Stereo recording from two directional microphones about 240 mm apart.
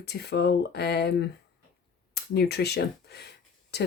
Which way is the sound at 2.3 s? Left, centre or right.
Left.